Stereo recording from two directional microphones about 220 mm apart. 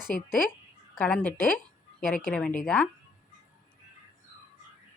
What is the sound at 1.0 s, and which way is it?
Speech, 5° left (ahead or behind).